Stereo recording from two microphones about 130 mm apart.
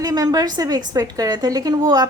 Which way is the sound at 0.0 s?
30° right (ahead or behind).